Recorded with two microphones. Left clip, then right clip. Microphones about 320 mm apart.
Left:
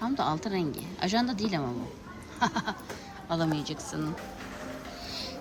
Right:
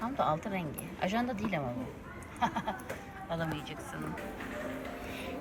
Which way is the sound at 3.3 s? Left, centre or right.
Centre.